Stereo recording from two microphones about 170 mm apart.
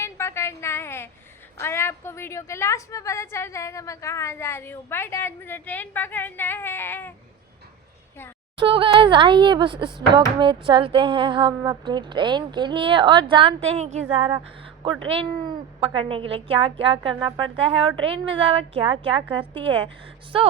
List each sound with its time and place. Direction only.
0.0 s a sound: 15° left (ahead or behind)
1.6 s a woman's voice: 15° left (ahead or behind)
8.5 s a woman's voice: 30° right (ahead or behind)